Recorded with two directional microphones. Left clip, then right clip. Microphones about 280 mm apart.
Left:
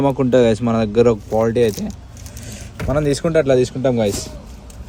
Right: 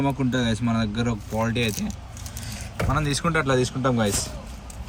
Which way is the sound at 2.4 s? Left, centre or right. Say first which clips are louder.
Right 1 dB; centre.